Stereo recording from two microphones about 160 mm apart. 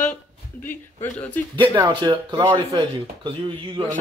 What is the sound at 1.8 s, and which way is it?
Speech, 30° right (ahead or behind).